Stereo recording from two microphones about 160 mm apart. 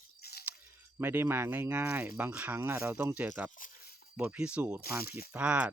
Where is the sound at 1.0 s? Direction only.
15° right (ahead or behind).